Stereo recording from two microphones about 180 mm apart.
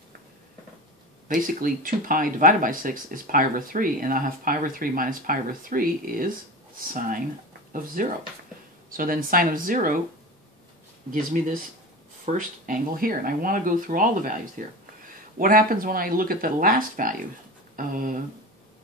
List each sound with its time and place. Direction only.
1.3 s speech: 50° right (ahead or behind)
11.1 s speech: 50° right (ahead or behind)